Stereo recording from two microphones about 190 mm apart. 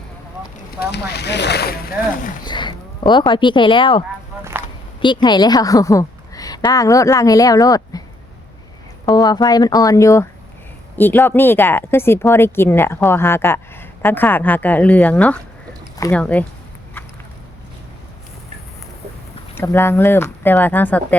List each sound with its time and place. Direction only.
0.8 s speech: 60° left (ahead or behind)
2.4 s a woman's voice: 25° left (ahead or behind)
9.0 s a woman's voice: 20° left (ahead or behind)
19.5 s a woman's voice: 10° left (ahead or behind)